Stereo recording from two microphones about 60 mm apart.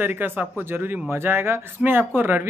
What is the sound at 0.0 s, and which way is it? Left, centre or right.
Speech, right.